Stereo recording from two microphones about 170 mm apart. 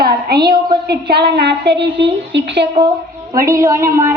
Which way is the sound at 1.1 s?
75° right (ahead or behind).